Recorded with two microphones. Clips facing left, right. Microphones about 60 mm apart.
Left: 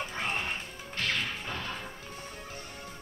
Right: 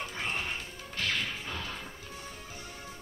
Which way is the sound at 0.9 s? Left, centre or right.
Left.